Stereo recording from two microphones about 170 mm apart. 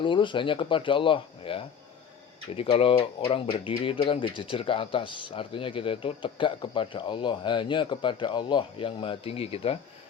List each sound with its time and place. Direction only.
0.0 s speech: 30° left (ahead or behind)